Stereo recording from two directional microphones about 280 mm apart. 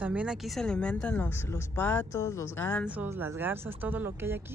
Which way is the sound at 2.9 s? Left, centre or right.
Centre.